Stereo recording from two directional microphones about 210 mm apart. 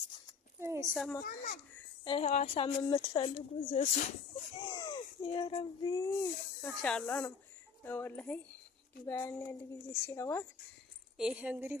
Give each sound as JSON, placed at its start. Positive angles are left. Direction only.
{"t": 0.6, "sound": "a woman's voice", "side_deg": -15}
{"t": 0.9, "sound": "speech", "side_deg": 0}
{"t": 1.2, "sound": "a child's voice", "side_deg": 40}
{"t": 2.0, "sound": "speech", "side_deg": 30}
{"t": 4.6, "sound": "speech", "side_deg": 20}
{"t": 6.6, "sound": "speech", "side_deg": 5}
{"t": 11.2, "sound": "speech", "side_deg": -5}